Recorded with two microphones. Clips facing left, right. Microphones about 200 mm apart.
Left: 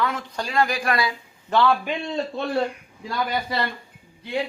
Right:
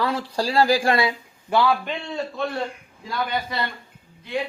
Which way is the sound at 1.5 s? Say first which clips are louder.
Even; 10° right (ahead or behind).